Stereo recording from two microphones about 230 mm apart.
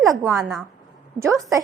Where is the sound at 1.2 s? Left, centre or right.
Centre.